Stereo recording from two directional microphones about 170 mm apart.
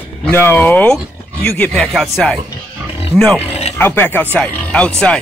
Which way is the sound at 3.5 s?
40° left (ahead or behind).